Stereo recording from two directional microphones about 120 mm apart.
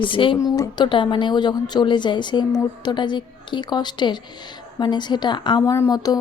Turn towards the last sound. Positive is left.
turn(degrees=35)  # may be behind; listen again after turning